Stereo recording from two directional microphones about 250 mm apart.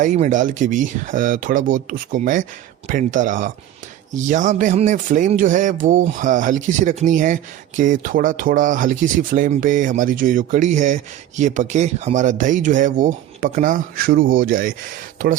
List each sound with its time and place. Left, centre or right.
0.0 s speech: right